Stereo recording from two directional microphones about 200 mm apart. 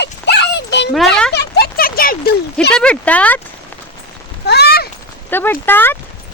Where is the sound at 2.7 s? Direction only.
5° left (ahead or behind).